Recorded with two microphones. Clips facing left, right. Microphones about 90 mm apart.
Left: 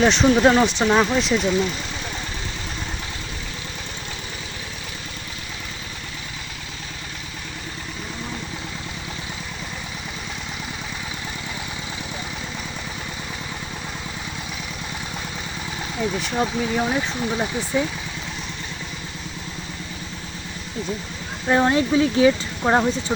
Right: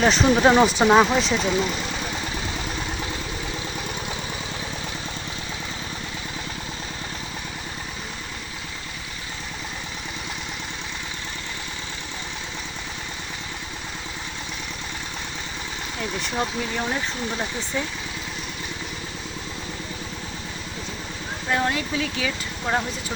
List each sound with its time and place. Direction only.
0.0 s speech: 5° right (ahead or behind)
16.0 s speech: 5° left (ahead or behind)
21.5 s speech: 30° left (ahead or behind)